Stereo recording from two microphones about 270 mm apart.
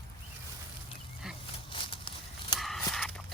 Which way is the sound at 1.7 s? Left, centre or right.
Centre.